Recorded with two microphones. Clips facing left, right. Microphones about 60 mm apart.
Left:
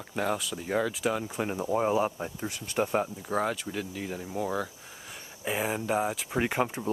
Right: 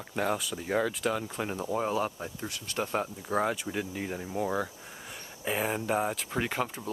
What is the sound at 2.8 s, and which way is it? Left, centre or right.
Speech, centre.